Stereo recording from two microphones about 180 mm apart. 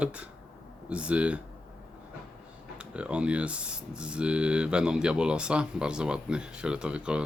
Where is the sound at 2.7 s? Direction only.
5° right (ahead or behind).